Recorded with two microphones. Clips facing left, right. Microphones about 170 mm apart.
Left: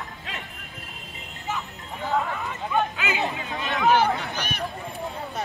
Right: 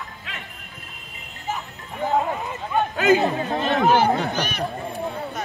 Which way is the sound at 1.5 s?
35° right (ahead or behind).